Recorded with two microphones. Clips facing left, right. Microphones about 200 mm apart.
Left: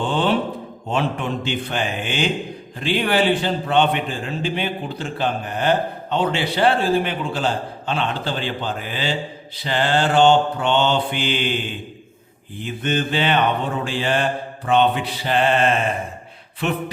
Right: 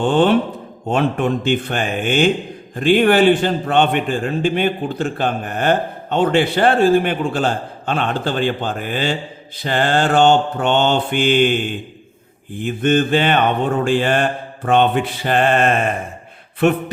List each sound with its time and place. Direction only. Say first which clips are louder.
0.0 s a man's voice: right 6 dB; 50° right (ahead or behind)